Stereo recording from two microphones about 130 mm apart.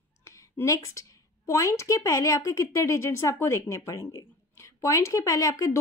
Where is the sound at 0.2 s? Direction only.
25° left (ahead or behind).